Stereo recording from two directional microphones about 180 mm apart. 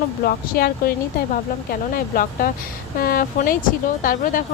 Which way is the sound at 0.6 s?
60° left (ahead or behind).